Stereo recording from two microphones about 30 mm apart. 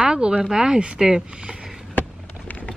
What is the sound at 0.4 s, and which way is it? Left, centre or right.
Speech, right.